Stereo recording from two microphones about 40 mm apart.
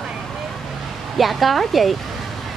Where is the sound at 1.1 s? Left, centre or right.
Centre.